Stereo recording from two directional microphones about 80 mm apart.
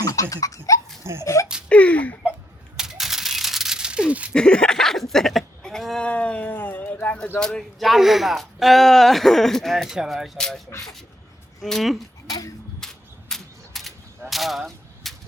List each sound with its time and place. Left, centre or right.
0.0 s laughter: left
1.2 s speech: left
1.7 s speech: centre
2.7 s a sound: centre
4.4 s a sound: centre
6.1 s speech: centre
10.3 s speech: centre
11.6 s speech: centre
12.8 s a sound: centre